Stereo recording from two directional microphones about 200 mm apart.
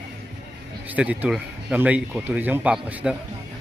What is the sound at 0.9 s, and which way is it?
Speech, 5° right (ahead or behind).